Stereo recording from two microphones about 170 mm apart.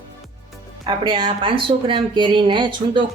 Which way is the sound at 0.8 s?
30° right (ahead or behind).